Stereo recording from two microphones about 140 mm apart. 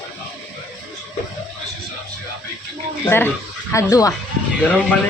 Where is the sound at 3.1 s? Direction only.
15° left (ahead or behind).